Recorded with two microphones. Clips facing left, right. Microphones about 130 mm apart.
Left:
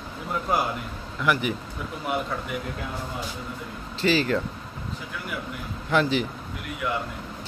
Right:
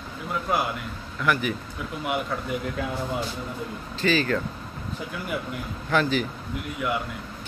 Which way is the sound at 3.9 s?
30° left (ahead or behind).